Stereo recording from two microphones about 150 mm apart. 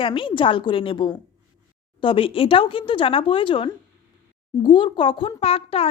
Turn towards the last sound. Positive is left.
turn(degrees=40)  # may be behind; listen again after turning